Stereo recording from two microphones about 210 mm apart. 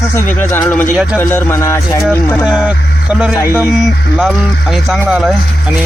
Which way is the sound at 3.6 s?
Centre (ahead or behind).